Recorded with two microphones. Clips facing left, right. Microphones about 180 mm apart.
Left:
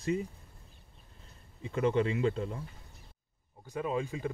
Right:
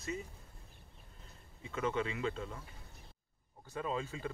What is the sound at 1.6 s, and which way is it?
Speech, 30° left (ahead or behind).